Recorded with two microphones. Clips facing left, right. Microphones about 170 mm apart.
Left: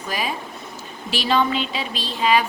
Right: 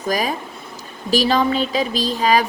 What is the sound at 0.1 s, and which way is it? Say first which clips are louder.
A woman's voice: right 6 dB; 40° right (ahead or behind).